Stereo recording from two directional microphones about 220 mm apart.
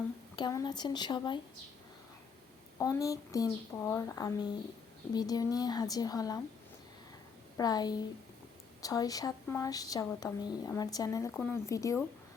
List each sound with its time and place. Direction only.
0.3 s speech: 20° left (ahead or behind)
2.7 s speech: 15° left (ahead or behind)
7.5 s speech: 15° left (ahead or behind)